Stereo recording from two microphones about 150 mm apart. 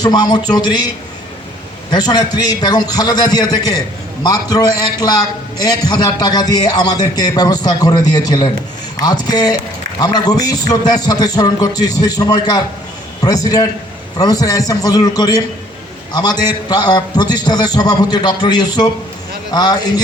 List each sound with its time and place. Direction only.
0.0 s a man's voice: 25° left (ahead or behind)
1.9 s a man's voice: 25° left (ahead or behind)